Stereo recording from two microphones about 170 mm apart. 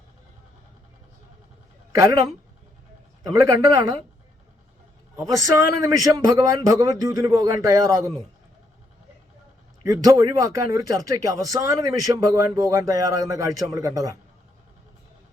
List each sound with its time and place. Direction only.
1.9 s a woman's voice: 20° right (ahead or behind)
3.3 s speech: 20° right (ahead or behind)
5.1 s speech: 20° right (ahead or behind)
9.8 s speech: 20° right (ahead or behind)